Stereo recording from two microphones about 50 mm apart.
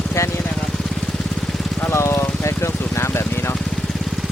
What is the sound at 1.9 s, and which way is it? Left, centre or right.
Vehicle, left.